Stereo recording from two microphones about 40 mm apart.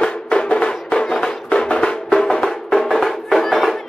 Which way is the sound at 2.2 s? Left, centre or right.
Centre.